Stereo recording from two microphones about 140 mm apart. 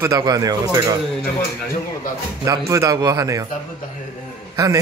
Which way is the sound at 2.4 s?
20° right (ahead or behind).